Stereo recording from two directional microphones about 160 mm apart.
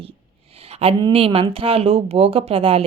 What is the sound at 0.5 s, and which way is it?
Speech, 40° right (ahead or behind).